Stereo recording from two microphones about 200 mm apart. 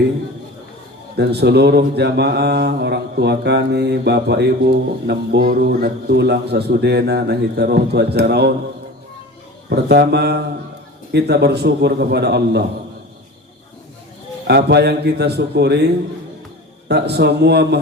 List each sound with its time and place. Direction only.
1.1 s speech: 55° right (ahead or behind)
9.6 s speech: 55° right (ahead or behind)
14.4 s speech: 55° right (ahead or behind)
16.9 s speech: 55° right (ahead or behind)